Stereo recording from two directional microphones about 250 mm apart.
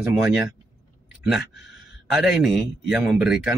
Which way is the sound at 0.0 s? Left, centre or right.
Centre.